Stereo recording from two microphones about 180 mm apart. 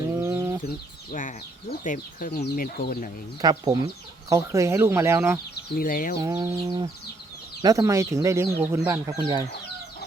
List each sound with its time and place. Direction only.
0.2 s chicken: 15° right (ahead or behind)
1.8 s speech: 50° left (ahead or behind)
3.4 s a sound: 20° right (ahead or behind)
4.3 s speech: 15° right (ahead or behind)
5.7 s speech: 50° left (ahead or behind)
6.2 s a sound: 20° right (ahead or behind)
7.6 s speech: 20° right (ahead or behind)